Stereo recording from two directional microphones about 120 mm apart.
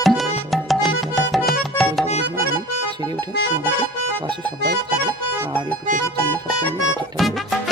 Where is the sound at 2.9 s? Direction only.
35° right (ahead or behind).